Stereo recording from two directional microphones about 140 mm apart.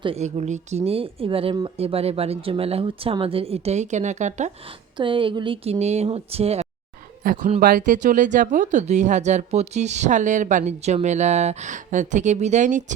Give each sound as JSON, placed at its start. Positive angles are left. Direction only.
{"t": 0.0, "sound": "speech", "side_deg": -45}
{"t": 0.9, "sound": "speech", "side_deg": -40}
{"t": 4.9, "sound": "speech", "side_deg": -35}
{"t": 7.2, "sound": "speech", "side_deg": -85}
{"t": 7.6, "sound": "speech", "side_deg": -75}